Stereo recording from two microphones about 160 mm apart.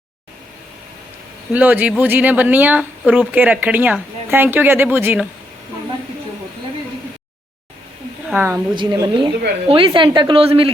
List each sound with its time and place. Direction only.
1.5 s speech: 10° right (ahead or behind)
8.3 s speech: 15° right (ahead or behind)
8.7 s a woman's voice: 25° right (ahead or behind)